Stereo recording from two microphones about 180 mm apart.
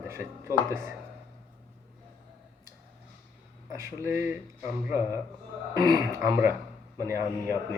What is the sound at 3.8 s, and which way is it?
Speech, 15° right (ahead or behind).